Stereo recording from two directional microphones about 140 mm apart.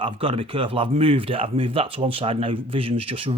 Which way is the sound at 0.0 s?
40° right (ahead or behind).